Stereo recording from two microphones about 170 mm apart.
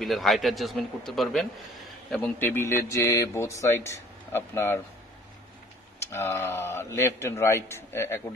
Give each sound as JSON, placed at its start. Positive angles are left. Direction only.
{"t": 0.0, "sound": "a man's voice", "side_deg": 0}
{"t": 6.1, "sound": "a man's voice", "side_deg": 15}